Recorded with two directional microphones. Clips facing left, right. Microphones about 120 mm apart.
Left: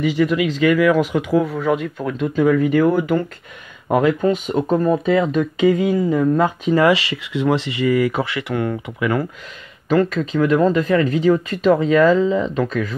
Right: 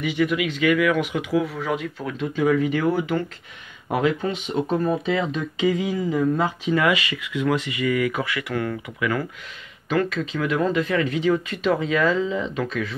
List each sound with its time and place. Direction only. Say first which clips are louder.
0.0 s speech: left 5 dB; 35° left (ahead or behind)
9.8 s speech: left 6 dB; 40° left (ahead or behind)